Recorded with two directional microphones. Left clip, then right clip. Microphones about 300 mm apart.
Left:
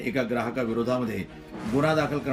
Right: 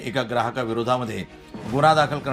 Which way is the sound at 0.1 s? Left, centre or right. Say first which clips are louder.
Right 4 dB; centre.